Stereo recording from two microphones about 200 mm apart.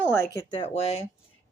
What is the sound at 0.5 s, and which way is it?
Speech, 30° left (ahead or behind).